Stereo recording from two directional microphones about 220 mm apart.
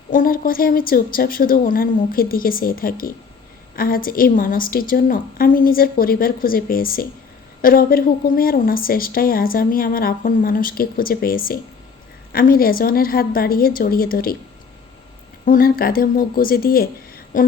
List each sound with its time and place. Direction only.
0.1 s a woman's voice: 40° left (ahead or behind)
15.4 s a woman's voice: 40° left (ahead or behind)